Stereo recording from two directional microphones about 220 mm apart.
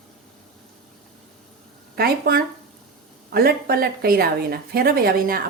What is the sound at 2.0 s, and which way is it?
Speech, 45° right (ahead or behind).